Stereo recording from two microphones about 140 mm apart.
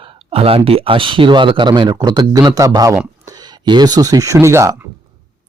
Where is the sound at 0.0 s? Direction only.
40° right (ahead or behind); by 4.9 s 20° right (ahead or behind).